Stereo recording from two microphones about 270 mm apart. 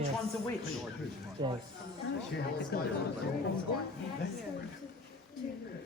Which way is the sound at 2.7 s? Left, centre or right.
Left.